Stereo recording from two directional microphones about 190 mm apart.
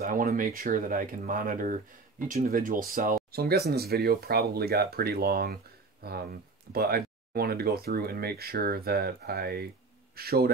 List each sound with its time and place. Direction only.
0.0 s speech: 45° right (ahead or behind)